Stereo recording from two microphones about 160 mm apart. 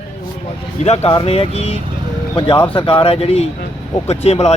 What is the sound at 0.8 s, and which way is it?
Speech, 40° left (ahead or behind).